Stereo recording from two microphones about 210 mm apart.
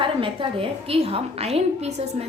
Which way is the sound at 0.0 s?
25° right (ahead or behind).